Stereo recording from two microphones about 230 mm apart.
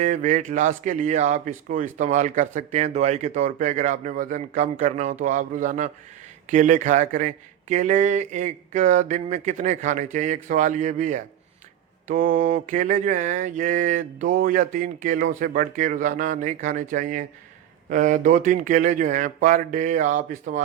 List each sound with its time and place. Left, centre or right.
0.0 s speech: right